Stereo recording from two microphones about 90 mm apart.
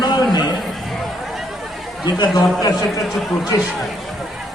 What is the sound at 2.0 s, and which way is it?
A man's voice, 50° left (ahead or behind).